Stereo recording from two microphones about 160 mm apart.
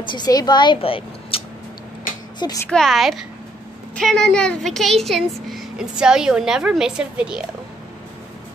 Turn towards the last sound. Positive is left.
turn(degrees=-5)  # may be behind; listen again after turning